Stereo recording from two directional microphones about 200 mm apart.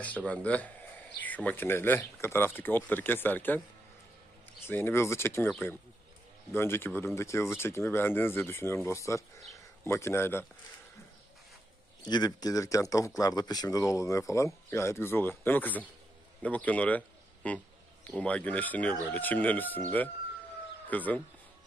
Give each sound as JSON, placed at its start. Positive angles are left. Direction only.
{"t": 0.0, "sound": "speech", "side_deg": 5}
{"t": 4.6, "sound": "speech", "side_deg": 10}
{"t": 12.0, "sound": "a man's voice", "side_deg": 20}
{"t": 20.9, "sound": "speech", "side_deg": 10}